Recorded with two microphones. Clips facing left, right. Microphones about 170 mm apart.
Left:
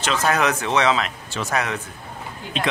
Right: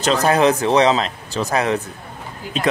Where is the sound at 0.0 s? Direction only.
35° right (ahead or behind).